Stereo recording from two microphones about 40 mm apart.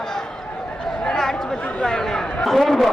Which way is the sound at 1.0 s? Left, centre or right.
Centre.